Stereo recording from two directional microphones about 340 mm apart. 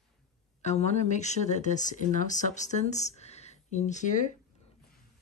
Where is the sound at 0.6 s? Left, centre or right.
Centre.